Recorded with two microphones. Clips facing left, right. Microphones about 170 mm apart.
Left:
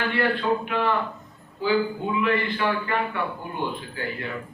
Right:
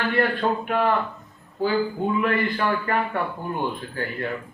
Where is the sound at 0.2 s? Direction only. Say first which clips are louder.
Even; 45° right (ahead or behind).